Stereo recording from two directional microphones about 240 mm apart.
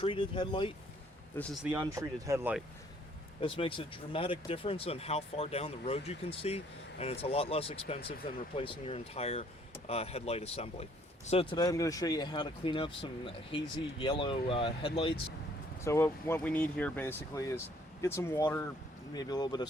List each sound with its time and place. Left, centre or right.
0.0 s speech: centre
1.4 s speech: centre
1.7 s speech: centre
3.4 s speech: left
15.8 s speech: centre